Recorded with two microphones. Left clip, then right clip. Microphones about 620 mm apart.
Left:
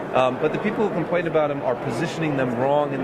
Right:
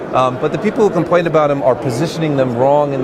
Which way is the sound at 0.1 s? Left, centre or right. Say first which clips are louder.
Right 6 dB; right.